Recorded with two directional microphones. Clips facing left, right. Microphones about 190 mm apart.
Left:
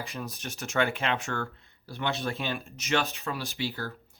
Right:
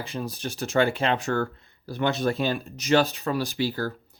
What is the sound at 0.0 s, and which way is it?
Speech, 30° right (ahead or behind).